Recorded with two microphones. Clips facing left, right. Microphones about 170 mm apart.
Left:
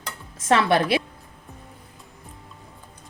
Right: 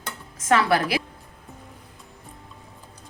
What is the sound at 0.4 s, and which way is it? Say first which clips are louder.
Speech: left 1 dB; 25° left (ahead or behind).